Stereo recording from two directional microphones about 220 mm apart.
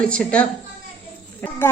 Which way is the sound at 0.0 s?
5° left (ahead or behind).